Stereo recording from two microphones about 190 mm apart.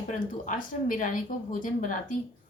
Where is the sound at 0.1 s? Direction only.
45° left (ahead or behind).